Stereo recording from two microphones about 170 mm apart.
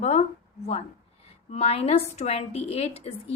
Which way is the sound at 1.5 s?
40° left (ahead or behind).